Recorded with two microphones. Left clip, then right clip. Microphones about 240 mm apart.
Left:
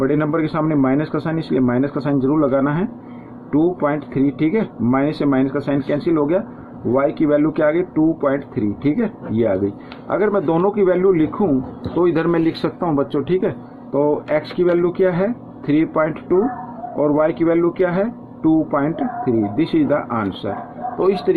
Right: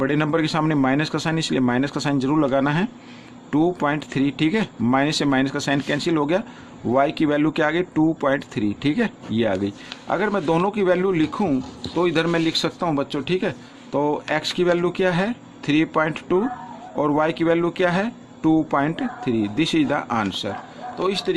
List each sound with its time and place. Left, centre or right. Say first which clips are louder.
0.0 s speech: left 3 dB; right
21.0 s speech: left 6 dB; right